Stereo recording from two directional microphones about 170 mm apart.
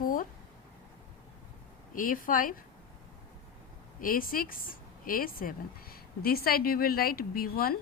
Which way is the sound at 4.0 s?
55° left (ahead or behind).